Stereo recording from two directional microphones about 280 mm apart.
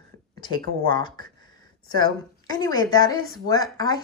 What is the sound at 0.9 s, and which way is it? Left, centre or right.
Speech, centre.